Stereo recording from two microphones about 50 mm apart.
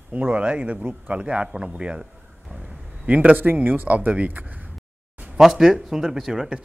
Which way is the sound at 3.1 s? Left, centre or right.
Right.